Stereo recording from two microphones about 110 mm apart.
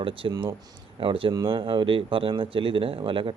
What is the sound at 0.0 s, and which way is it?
Speech, 50° right (ahead or behind).